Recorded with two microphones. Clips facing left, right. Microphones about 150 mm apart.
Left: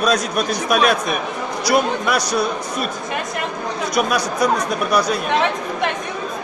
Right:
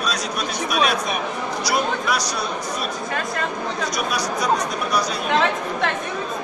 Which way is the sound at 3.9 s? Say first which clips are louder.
Left 5 dB; 55° left (ahead or behind).